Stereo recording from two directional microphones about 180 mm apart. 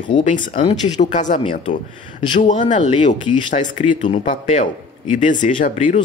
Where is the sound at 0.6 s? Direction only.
40° left (ahead or behind).